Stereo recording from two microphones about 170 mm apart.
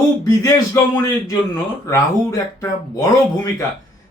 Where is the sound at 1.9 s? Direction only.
20° left (ahead or behind).